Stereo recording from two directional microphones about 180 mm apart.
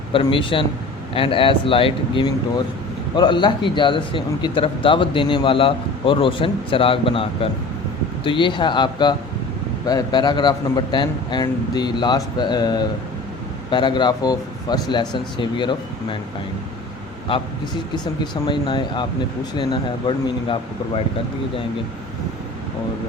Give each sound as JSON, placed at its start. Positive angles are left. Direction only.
{"t": 0.1, "sound": "a man's voice", "side_deg": 30}
{"t": 17.3, "sound": "a man's voice", "side_deg": 25}